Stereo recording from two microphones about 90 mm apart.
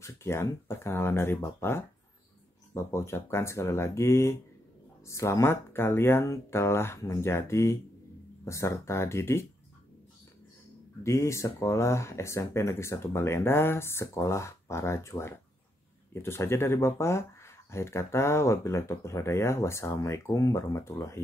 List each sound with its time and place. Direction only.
0.0 s speech: 30° left (ahead or behind)
11.1 s speech: 30° left (ahead or behind)